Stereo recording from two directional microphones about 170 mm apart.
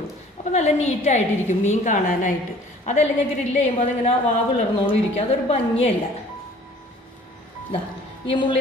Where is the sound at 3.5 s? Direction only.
40° left (ahead or behind).